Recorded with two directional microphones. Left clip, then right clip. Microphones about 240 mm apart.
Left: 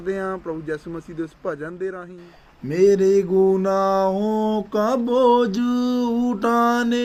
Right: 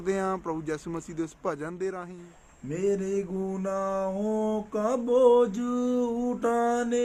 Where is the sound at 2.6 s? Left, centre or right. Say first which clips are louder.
Left 12 dB; left.